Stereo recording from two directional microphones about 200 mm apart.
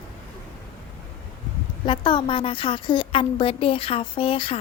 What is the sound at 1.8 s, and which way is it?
A woman's voice, 25° left (ahead or behind).